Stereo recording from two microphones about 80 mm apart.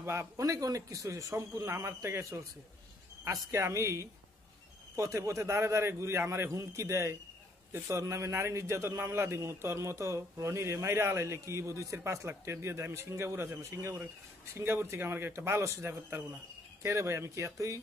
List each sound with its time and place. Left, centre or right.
0.0 s speech: right
0.4 s a man's voice: right